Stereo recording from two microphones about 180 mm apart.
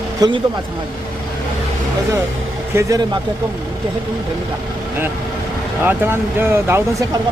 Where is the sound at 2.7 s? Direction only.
15° right (ahead or behind).